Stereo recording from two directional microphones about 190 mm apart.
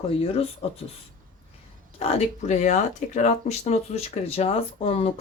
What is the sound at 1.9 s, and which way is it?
Speech, 35° left (ahead or behind).